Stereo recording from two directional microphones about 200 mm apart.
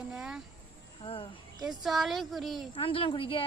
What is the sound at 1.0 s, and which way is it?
Speech, 25° left (ahead or behind).